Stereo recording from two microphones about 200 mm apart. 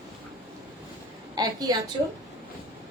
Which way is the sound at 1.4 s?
20° right (ahead or behind).